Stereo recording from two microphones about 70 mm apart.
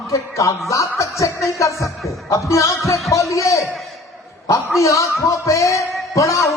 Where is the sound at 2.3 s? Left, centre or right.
Left.